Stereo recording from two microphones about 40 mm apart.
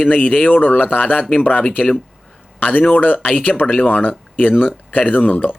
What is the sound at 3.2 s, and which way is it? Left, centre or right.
Speech, left.